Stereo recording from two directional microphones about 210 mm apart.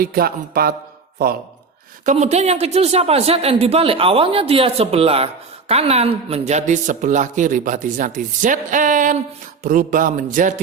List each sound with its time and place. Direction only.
0.0 s speech: 45° right (ahead or behind)
2.0 s a woman's voice: 35° right (ahead or behind)
9.6 s a sound: 40° right (ahead or behind)